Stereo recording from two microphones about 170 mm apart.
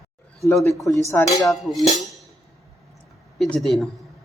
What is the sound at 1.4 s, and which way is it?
Speech, centre (ahead or behind).